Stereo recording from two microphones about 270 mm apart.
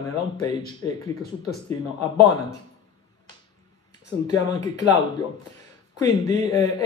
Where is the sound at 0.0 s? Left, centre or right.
Centre.